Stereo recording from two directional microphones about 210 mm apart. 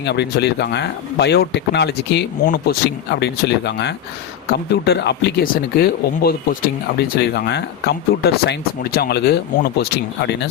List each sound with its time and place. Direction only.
0.0 s speech: 55° left (ahead or behind)